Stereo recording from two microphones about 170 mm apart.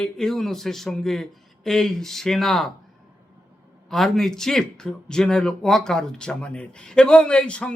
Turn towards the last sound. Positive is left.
turn(degrees=5)  # may be behind; listen again after turning